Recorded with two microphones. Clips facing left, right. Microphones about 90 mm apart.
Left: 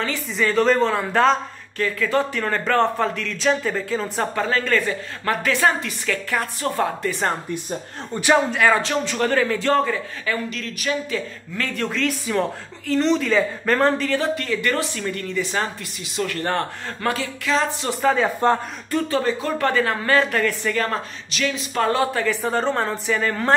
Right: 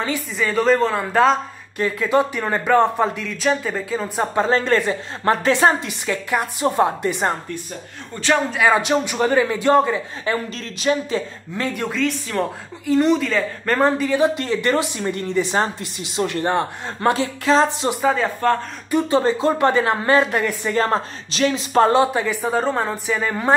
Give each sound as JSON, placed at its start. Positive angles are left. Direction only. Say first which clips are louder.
{"t": 0.4, "sound": "a woman's voice", "louder": "even", "side_deg": 0}
{"t": 1.8, "sound": "a man's voice", "louder": "right 3 dB", "side_deg": -20}
{"t": 4.4, "sound": "a woman's voice", "louder": "right 4 dB", "side_deg": -25}
{"t": 8.1, "sound": "a man's voice", "louder": "left 1 dB", "side_deg": 15}
{"t": 8.5, "sound": "a woman's voice", "louder": "right 2 dB", "side_deg": -5}
{"t": 10.2, "sound": "a woman's voice", "louder": "right 1 dB", "side_deg": -35}
{"t": 11.9, "sound": "a woman's voice", "louder": "even", "side_deg": 0}
{"t": 12.8, "sound": "a man's voice", "louder": "right 3 dB", "side_deg": -10}
{"t": 13.2, "sound": "a man's voice", "louder": "left 2 dB", "side_deg": 0}
{"t": 17.1, "sound": "a woman's voice", "louder": "right 5 dB", "side_deg": -30}
{"t": 18.0, "sound": "a woman's voice", "louder": "left 1 dB", "side_deg": 0}
{"t": 18.9, "sound": "a woman's voice", "louder": "right 4 dB", "side_deg": -15}
{"t": 22.0, "sound": "a man's voice", "louder": "right 1 dB", "side_deg": -15}
{"t": 22.4, "sound": "a woman's voice", "louder": "right 1 dB", "side_deg": -5}